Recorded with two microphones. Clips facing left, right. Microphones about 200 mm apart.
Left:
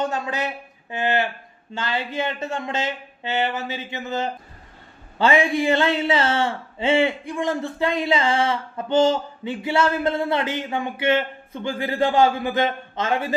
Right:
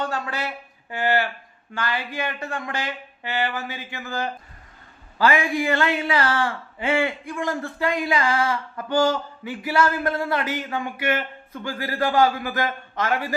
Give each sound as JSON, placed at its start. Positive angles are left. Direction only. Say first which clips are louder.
{"t": 0.0, "sound": "speech", "louder": "left 3 dB", "side_deg": 20}